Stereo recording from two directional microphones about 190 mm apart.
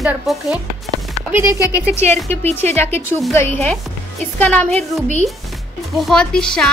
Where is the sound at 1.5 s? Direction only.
15° left (ahead or behind).